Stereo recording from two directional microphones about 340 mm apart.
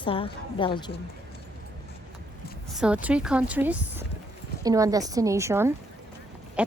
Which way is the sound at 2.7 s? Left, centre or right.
Centre.